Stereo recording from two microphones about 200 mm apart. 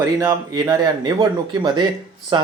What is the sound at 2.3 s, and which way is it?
Speech, 25° right (ahead or behind).